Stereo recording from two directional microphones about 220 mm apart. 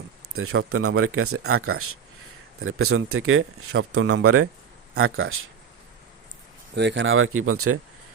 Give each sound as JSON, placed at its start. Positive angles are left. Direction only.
{"t": 0.3, "sound": "speech", "side_deg": -70}
{"t": 4.9, "sound": "speech", "side_deg": -70}
{"t": 6.7, "sound": "speech", "side_deg": -55}